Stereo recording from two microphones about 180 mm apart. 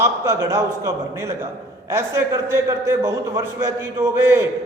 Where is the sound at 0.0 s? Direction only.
15° right (ahead or behind).